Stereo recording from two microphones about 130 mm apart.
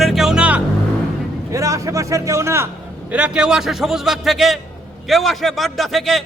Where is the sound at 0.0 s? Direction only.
Centre (ahead or behind).